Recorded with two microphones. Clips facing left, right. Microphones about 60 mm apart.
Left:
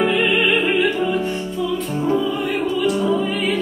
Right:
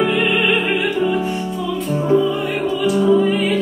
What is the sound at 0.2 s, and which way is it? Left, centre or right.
Music, centre.